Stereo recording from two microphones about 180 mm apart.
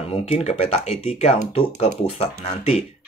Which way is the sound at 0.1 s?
35° left (ahead or behind).